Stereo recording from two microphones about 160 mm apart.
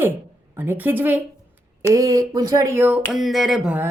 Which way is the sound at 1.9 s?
20° right (ahead or behind).